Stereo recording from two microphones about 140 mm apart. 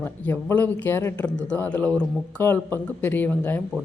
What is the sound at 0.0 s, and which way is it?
Speech, 15° left (ahead or behind).